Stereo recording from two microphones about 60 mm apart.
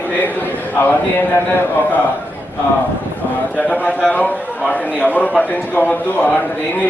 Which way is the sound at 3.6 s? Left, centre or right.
Left.